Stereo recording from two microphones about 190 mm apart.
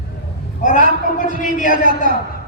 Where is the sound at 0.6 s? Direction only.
40° left (ahead or behind).